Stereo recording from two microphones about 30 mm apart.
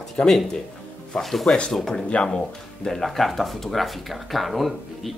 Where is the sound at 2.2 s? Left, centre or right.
Left.